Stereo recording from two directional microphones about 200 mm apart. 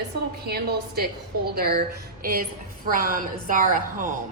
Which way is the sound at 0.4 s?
55° right (ahead or behind).